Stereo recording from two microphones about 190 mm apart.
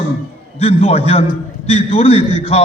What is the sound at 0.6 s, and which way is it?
A man's voice, 30° left (ahead or behind).